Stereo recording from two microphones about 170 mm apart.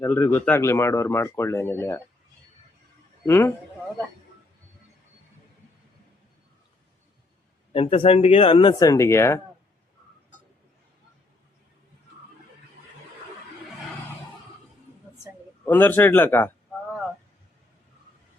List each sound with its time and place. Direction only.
0.0 s speech: 15° left (ahead or behind)
3.2 s speech: 15° left (ahead or behind)
7.7 s speech: 35° left (ahead or behind)
8.8 s speech: 20° left (ahead or behind)
15.6 s speech: 10° left (ahead or behind)